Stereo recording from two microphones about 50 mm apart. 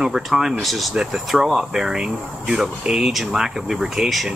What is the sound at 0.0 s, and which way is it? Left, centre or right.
Speech, centre.